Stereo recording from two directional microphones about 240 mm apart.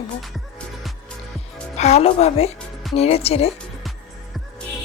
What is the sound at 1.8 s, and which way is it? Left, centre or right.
A woman's voice, left.